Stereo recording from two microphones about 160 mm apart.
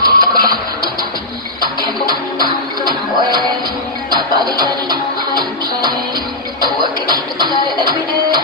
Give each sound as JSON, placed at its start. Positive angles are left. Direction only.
{"t": 0.0, "sound": "music", "side_deg": -25}
{"t": 1.6, "sound": "music", "side_deg": -25}